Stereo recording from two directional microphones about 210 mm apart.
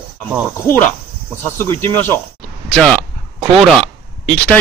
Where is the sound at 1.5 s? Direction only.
10° left (ahead or behind).